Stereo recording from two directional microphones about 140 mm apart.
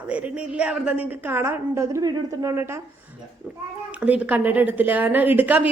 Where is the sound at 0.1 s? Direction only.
10° right (ahead or behind).